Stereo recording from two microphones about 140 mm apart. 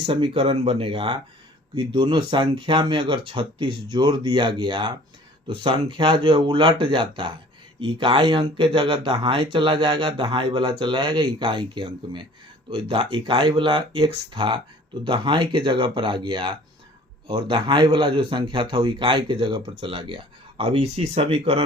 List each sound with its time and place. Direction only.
0.0 s speech: 40° right (ahead or behind)